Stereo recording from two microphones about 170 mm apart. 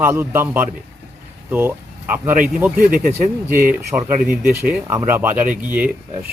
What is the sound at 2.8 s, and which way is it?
Speech, 55° right (ahead or behind).